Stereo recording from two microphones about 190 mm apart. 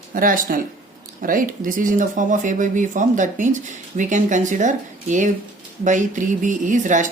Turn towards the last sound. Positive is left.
turn(degrees=-40)  # may be behind; listen again after turning